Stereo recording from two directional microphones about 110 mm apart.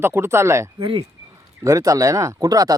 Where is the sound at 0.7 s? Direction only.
50° right (ahead or behind).